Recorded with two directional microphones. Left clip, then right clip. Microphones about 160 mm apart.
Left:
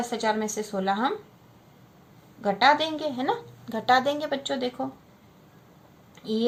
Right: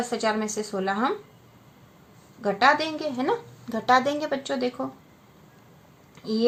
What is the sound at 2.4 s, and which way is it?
A woman's voice, 40° right (ahead or behind).